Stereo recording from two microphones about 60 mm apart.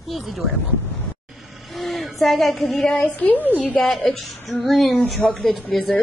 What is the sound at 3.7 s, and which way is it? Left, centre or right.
A woman's voice, centre.